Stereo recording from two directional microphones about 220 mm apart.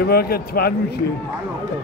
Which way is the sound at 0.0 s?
45° left (ahead or behind).